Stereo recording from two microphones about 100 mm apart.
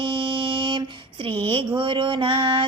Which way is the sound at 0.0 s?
55° right (ahead or behind).